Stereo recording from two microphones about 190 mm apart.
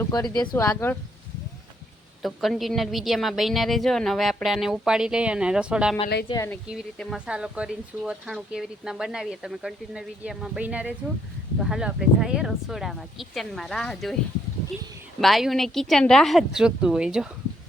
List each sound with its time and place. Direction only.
0.0 s speech: 20° left (ahead or behind)
2.2 s speech: centre (ahead or behind)
6.2 s speech: 15° left (ahead or behind)
6.7 s speech: centre (ahead or behind)
15.2 s speech: centre (ahead or behind)